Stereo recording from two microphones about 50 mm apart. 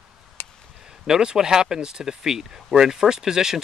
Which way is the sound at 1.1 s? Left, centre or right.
Centre.